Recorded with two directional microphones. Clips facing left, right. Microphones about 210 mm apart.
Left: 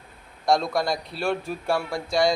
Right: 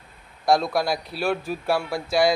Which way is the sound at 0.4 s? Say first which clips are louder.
Right 1 dB; 5° right (ahead or behind).